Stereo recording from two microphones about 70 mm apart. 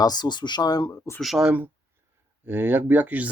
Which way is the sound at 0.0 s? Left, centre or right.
Left.